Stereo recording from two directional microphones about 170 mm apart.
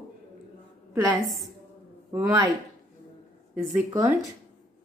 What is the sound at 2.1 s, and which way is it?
Speech, 20° right (ahead or behind).